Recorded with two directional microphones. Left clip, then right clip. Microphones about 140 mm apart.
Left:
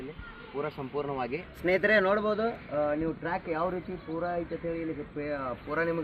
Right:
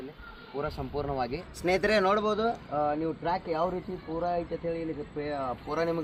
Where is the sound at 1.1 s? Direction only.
40° right (ahead or behind).